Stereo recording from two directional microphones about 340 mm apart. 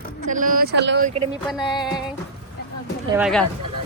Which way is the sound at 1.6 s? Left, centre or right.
Centre.